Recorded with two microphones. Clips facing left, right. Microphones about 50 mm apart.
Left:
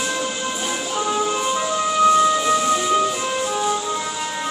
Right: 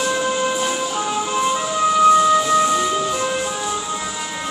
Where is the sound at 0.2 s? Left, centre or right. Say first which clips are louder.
Right 5 dB; centre.